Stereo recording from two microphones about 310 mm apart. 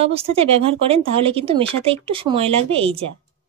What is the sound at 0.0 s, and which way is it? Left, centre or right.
Speech, centre.